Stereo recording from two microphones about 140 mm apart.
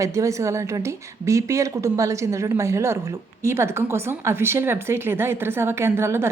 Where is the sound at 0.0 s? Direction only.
20° right (ahead or behind).